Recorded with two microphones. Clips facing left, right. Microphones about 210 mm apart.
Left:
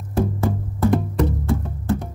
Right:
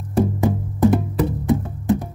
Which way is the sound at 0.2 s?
15° right (ahead or behind).